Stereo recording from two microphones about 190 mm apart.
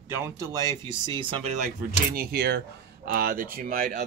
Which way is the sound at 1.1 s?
30° right (ahead or behind).